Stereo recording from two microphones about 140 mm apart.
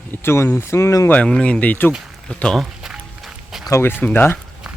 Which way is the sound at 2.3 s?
5° left (ahead or behind).